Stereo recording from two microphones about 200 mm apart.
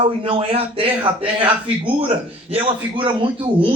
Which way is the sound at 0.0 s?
25° right (ahead or behind).